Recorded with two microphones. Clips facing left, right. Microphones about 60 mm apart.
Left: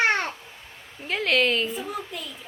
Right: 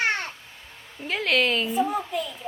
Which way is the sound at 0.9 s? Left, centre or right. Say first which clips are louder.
Even; centre.